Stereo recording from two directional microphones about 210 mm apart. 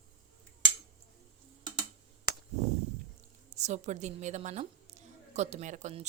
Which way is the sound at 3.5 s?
35° right (ahead or behind).